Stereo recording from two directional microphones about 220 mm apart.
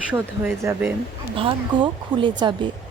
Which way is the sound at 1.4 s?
20° right (ahead or behind).